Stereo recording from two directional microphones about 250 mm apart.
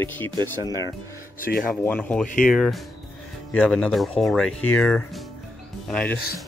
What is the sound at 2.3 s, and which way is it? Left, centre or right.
Speech, left.